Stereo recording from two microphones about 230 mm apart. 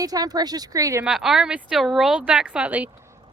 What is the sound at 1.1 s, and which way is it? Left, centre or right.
Speech, centre.